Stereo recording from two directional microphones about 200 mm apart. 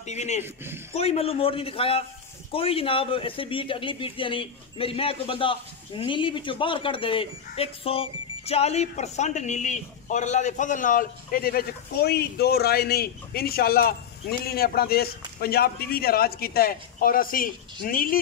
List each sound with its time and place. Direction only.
0.0 s a man's voice: 35° left (ahead or behind)